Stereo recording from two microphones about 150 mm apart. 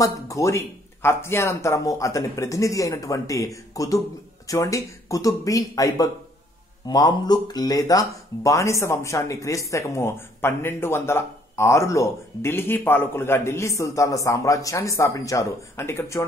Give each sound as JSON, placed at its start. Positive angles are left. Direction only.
{"t": 0.0, "sound": "speech", "side_deg": 20}